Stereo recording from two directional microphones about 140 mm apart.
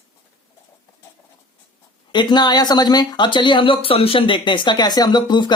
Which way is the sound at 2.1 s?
30° left (ahead or behind).